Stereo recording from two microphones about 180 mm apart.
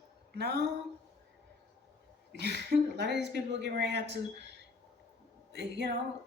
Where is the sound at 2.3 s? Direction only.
65° left (ahead or behind).